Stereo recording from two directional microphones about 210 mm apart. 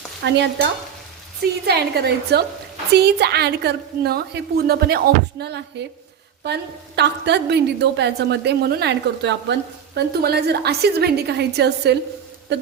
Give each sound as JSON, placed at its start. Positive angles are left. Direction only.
{"t": 0.2, "sound": "stir", "side_deg": -55}
{"t": 1.6, "sound": "a woman's voice", "side_deg": -50}
{"t": 12.5, "sound": "a sound", "side_deg": -55}